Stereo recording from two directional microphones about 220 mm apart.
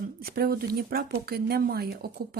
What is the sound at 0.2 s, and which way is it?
Speech, 40° right (ahead or behind).